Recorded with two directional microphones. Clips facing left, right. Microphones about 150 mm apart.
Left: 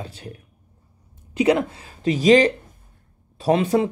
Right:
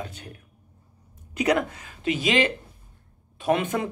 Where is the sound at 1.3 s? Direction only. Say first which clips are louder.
Left 4 dB; 30° left (ahead or behind).